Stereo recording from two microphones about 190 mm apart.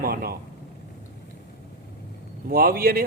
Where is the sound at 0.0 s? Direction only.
50° right (ahead or behind).